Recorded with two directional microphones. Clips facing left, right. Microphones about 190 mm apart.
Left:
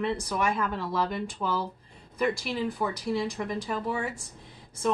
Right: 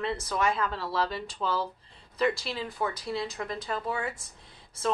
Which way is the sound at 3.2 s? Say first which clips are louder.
Left 3 dB; 10° left (ahead or behind).